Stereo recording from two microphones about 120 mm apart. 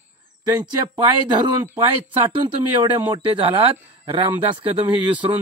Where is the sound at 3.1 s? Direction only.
45° right (ahead or behind).